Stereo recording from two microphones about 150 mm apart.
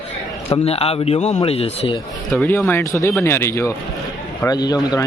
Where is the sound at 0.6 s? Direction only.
40° left (ahead or behind).